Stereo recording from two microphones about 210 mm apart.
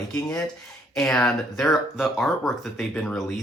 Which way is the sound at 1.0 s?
5° left (ahead or behind).